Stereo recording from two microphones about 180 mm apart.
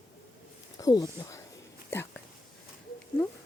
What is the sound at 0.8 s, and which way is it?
Speech, 20° left (ahead or behind).